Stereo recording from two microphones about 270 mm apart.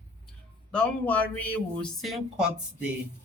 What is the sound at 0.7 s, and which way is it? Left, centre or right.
Speech, centre.